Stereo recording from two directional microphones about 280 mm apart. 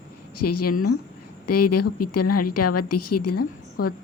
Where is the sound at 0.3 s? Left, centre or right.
Left.